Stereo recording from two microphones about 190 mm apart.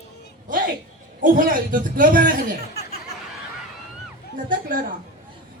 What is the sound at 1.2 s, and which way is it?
A man's voice, 45° right (ahead or behind).